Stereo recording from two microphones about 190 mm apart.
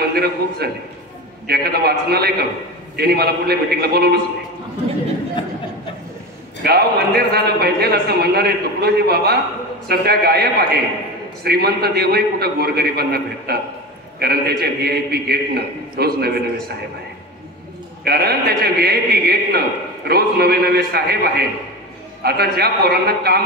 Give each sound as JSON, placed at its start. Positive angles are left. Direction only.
{"t": 0.1, "sound": "a man's voice", "side_deg": -55}
{"t": 6.6, "sound": "a man's voice", "side_deg": -55}
{"t": 18.0, "sound": "a man's voice", "side_deg": -55}